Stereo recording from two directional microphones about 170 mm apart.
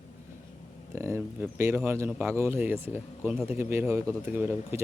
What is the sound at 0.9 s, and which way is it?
Speech, 15° right (ahead or behind).